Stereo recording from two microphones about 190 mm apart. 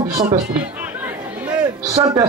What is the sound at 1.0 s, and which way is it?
Chatter, 10° right (ahead or behind).